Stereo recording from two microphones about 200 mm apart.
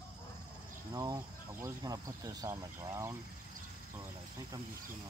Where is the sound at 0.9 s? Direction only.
15° right (ahead or behind).